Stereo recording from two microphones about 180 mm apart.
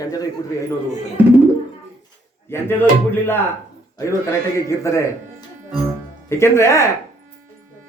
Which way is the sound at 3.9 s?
15° left (ahead or behind).